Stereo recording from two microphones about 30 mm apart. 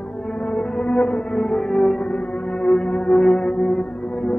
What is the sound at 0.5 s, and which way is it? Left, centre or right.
Music, left.